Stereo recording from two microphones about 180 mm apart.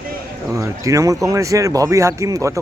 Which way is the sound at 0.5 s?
15° right (ahead or behind).